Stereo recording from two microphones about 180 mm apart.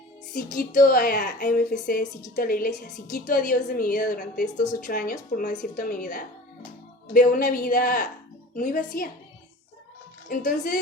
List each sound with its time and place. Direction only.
0.5 s a woman's voice: 50° left (ahead or behind)
10.2 s a woman's voice: 45° left (ahead or behind)